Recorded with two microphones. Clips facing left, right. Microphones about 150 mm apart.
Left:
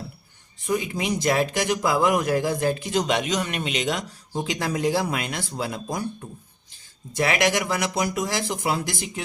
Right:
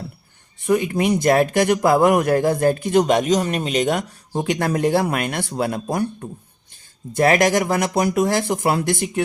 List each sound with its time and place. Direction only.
0.6 s speech: 60° right (ahead or behind)
7.1 s speech: 45° right (ahead or behind)